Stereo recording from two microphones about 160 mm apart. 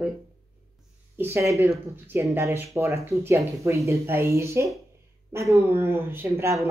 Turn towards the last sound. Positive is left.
turn(degrees=-15)  # may be behind; listen again after turning